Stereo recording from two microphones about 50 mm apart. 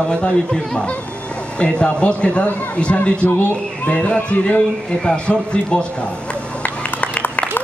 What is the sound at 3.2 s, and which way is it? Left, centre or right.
Speech, left.